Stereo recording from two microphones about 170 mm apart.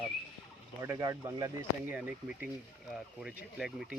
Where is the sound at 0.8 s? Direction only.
20° right (ahead or behind).